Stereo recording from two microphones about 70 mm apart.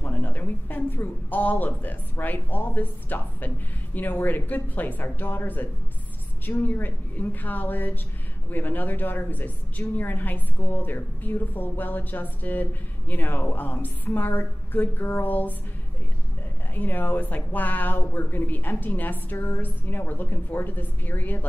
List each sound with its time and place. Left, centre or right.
0.0 s speech: left
16.7 s speech: left